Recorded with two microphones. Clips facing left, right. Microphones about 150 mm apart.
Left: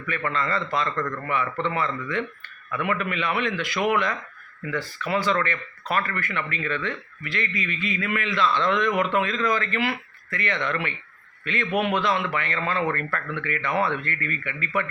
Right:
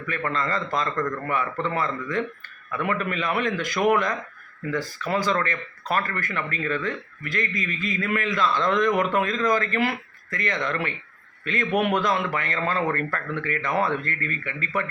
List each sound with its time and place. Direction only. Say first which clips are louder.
0.3 s a man's voice: even; 40° right (ahead or behind)